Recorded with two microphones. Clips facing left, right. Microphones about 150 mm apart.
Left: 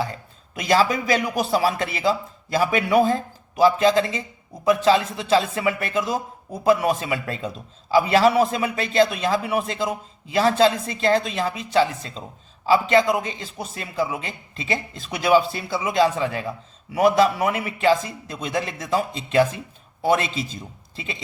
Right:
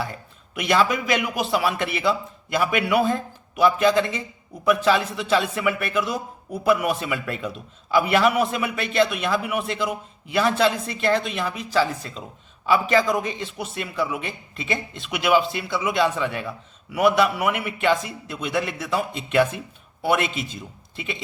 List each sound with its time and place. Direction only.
0.0 s a man's voice: 30° left (ahead or behind)